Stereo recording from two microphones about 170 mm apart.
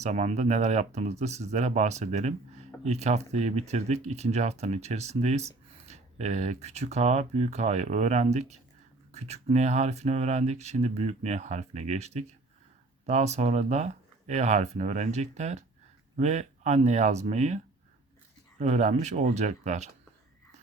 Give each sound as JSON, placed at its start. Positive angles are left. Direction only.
{"t": 0.0, "sound": "speech", "side_deg": -40}
{"t": 18.6, "sound": "speech", "side_deg": -40}